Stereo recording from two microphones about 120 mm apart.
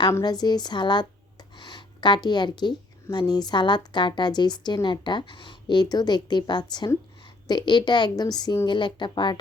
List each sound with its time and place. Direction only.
0.1 s a woman's voice: 35° left (ahead or behind)